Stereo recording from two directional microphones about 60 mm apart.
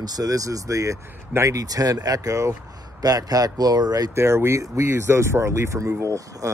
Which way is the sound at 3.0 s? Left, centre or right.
Right.